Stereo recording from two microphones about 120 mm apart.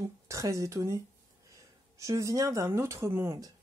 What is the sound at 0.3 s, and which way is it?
Speech, 25° right (ahead or behind).